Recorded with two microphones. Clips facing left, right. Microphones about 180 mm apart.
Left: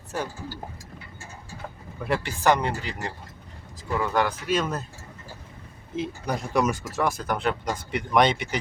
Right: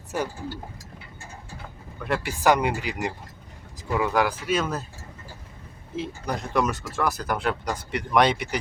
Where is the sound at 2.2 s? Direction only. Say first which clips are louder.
Right 2 dB; 10° right (ahead or behind).